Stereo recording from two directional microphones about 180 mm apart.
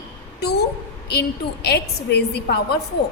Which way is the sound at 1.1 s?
65° left (ahead or behind).